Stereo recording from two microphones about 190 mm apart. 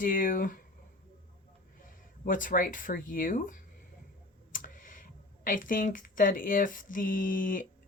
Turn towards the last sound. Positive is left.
turn(degrees=45)  # may be behind; listen again after turning